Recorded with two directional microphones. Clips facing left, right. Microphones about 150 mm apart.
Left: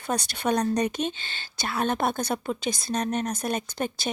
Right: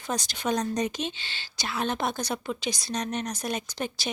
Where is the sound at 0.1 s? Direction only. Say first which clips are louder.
Left 3 dB; 60° left (ahead or behind).